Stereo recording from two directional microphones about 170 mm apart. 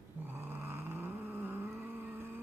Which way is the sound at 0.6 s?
10° right (ahead or behind).